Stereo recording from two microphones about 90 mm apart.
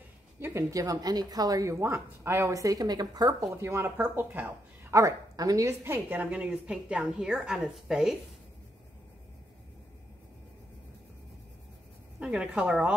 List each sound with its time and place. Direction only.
0.4 s speech: 30° right (ahead or behind)
1.8 s speech: 30° right (ahead or behind); by 3.4 s 45° right (ahead or behind)
3.5 s speech: 30° right (ahead or behind)
4.9 s speech: 40° right (ahead or behind)
5.7 s a woman's voice: 25° right (ahead or behind); by 8.2 s 5° right (ahead or behind)
12.2 s a woman's voice: 10° right (ahead or behind)